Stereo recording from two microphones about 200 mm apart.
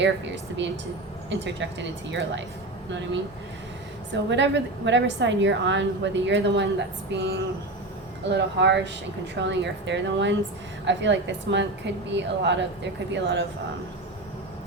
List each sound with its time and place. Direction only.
1.3 s a woman's voice: 60° right (ahead or behind)
4.1 s a woman's voice: 60° right (ahead or behind)